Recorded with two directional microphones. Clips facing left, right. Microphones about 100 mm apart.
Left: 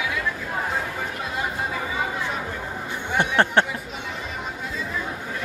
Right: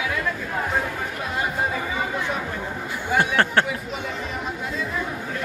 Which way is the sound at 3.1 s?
20° left (ahead or behind).